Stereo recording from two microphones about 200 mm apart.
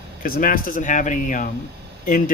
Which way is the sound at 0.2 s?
45° left (ahead or behind).